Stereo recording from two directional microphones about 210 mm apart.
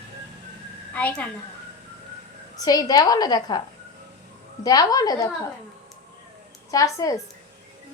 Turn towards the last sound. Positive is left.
turn(degrees=15)  # may be behind; listen again after turning